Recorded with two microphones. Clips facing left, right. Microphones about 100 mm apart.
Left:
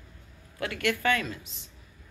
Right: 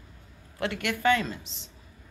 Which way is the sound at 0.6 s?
20° right (ahead or behind).